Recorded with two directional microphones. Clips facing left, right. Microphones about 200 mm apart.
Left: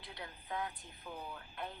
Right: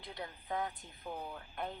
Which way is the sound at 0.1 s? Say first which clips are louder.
Right 4 dB; 40° right (ahead or behind).